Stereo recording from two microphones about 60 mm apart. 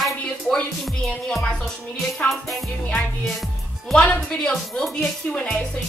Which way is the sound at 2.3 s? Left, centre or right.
Centre.